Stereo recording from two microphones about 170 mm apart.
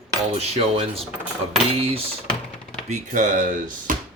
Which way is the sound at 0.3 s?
40° right (ahead or behind).